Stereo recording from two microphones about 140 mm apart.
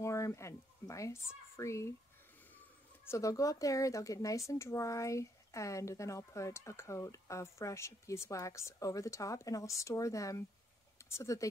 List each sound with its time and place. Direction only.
0.0 s speech: 20° left (ahead or behind)
3.1 s speech: 25° left (ahead or behind)